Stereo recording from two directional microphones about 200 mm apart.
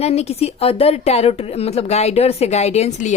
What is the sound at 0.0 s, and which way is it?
A woman's voice, 30° left (ahead or behind).